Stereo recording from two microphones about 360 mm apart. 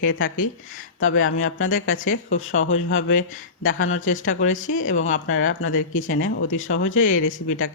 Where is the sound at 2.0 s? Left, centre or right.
Left.